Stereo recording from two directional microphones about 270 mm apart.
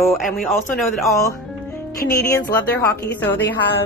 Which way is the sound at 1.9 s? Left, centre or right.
Left.